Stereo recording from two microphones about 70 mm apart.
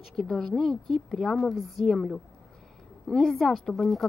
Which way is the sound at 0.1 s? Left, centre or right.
Centre.